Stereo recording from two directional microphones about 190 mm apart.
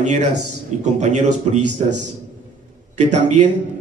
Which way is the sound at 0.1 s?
40° right (ahead or behind).